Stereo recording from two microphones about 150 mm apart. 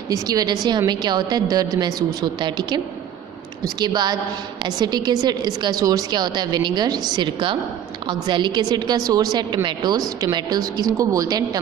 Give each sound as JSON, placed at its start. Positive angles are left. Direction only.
{"t": 0.1, "sound": "a woman's voice", "side_deg": -25}